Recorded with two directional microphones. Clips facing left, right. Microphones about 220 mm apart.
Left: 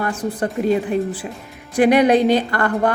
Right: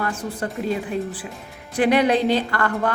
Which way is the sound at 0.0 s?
20° left (ahead or behind).